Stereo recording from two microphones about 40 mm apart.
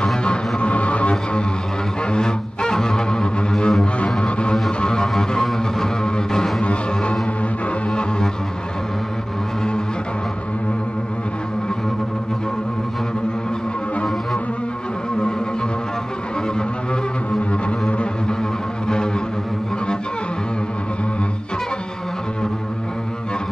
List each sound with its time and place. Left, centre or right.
0.0 s music: left
2.0 s music: centre
4.6 s music: centre
6.6 s music: left
17.4 s double bass: left